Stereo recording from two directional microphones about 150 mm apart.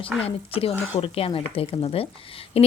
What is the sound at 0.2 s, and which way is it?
Speech, 40° left (ahead or behind).